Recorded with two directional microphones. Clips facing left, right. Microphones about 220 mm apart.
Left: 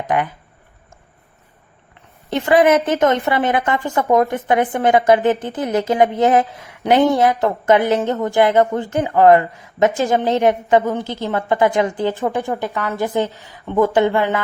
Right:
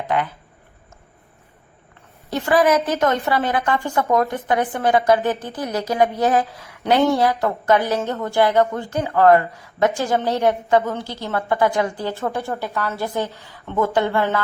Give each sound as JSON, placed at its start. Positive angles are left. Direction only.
{"t": 0.1, "sound": "a woman's voice", "side_deg": 15}
{"t": 2.3, "sound": "a woman's voice", "side_deg": 20}